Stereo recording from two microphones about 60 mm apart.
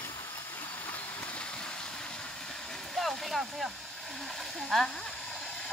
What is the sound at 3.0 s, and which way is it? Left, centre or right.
Speech, centre.